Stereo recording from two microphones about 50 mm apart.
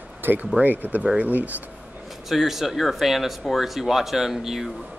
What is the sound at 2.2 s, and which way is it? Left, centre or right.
Speech, centre.